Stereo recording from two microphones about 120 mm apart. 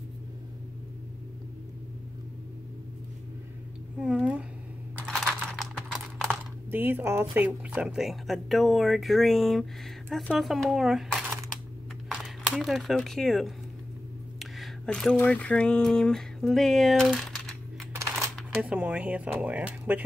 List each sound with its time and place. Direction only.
4.0 s a sound: 5° right (ahead or behind)
5.0 s computer keyboard: centre (ahead or behind)
6.7 s speech: 15° right (ahead or behind); by 13.5 s centre (ahead or behind)
14.4 s a sound: centre (ahead or behind)
15.1 s speech: 10° left (ahead or behind)
17.1 s typing: 5° left (ahead or behind)
17.9 s coin: 25° right (ahead or behind)
18.6 s speech: 10° right (ahead or behind)